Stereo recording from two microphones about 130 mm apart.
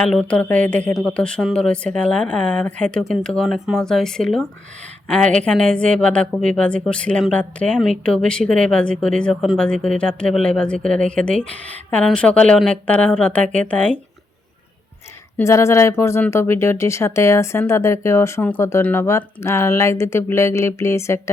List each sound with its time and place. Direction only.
0.0 s a woman's voice: 5° left (ahead or behind)
15.4 s speech: 20° left (ahead or behind)